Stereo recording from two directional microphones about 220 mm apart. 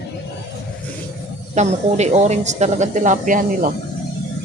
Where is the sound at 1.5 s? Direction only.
30° right (ahead or behind).